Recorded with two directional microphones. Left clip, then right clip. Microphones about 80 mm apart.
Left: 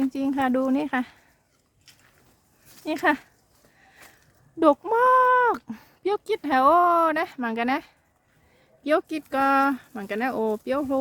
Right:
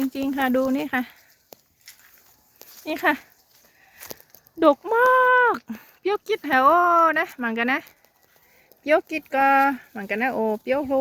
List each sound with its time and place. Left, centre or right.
0.0 s speech: centre
2.8 s speech: left
4.9 s a sound: centre
5.7 s speech: left
10.7 s speech: left